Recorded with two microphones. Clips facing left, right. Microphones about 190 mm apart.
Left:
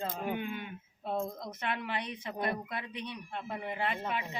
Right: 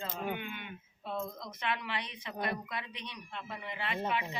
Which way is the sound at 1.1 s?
50° left (ahead or behind).